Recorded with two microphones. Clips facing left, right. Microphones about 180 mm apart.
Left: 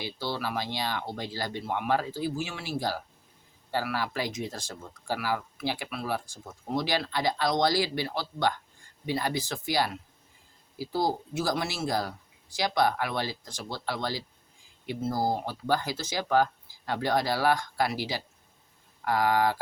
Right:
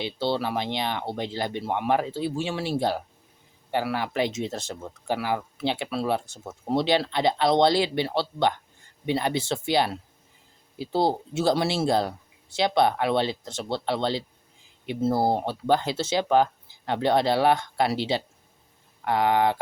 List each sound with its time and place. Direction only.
0.0 s speech: 25° right (ahead or behind)